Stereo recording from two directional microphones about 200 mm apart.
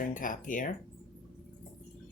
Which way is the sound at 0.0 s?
40° left (ahead or behind).